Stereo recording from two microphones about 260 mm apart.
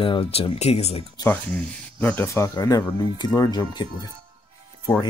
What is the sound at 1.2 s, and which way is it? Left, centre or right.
Speech, centre.